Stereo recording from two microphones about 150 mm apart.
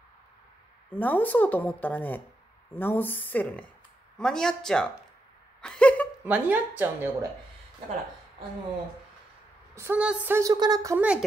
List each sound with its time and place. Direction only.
0.8 s a man's voice: 10° left (ahead or behind)
5.6 s a sound: 5° left (ahead or behind)
6.2 s speech: 10° right (ahead or behind)
9.8 s speech: 10° right (ahead or behind)
11.0 s speech: 5° right (ahead or behind)